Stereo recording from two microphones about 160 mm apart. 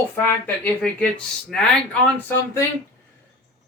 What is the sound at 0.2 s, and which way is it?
Speech, 10° left (ahead or behind).